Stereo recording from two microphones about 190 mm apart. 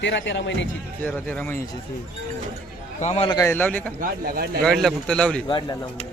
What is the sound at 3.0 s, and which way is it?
Speech, 35° left (ahead or behind).